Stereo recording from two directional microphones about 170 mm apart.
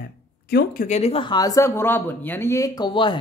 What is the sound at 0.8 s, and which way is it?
Speech, 40° left (ahead or behind).